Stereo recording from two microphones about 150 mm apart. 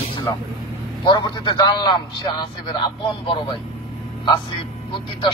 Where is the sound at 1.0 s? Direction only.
30° left (ahead or behind).